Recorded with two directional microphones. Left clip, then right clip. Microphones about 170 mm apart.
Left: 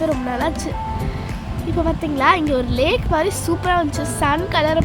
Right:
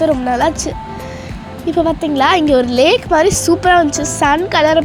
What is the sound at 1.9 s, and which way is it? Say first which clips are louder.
Speech: right 2 dB; 20° right (ahead or behind).